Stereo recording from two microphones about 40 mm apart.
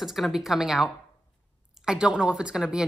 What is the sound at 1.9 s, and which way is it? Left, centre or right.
Speech, centre.